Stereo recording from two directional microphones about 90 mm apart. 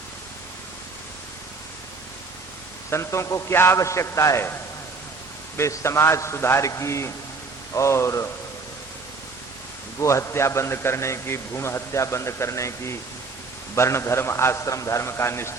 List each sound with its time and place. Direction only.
2.9 s a man's voice: 30° left (ahead or behind)
5.5 s a man's voice: 30° left (ahead or behind)
10.0 s a man's voice: 35° left (ahead or behind)